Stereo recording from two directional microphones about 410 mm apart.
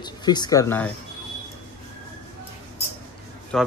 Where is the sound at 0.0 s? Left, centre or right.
Centre.